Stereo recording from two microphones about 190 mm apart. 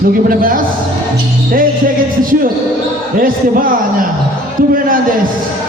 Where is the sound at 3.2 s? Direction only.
45° right (ahead or behind).